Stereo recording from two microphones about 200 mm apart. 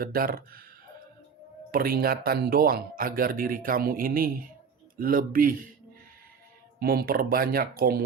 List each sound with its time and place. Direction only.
0.0 s speech: 45° right (ahead or behind)
1.7 s speech: 50° right (ahead or behind)
6.7 s speech: 50° right (ahead or behind)